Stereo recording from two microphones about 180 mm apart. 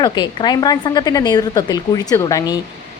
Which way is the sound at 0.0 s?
25° left (ahead or behind).